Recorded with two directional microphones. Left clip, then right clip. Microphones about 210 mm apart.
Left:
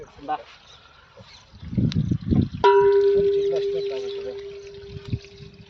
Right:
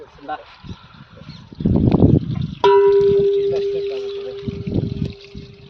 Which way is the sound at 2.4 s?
55° right (ahead or behind).